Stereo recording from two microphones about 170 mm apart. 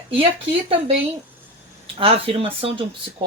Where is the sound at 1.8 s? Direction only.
35° right (ahead or behind).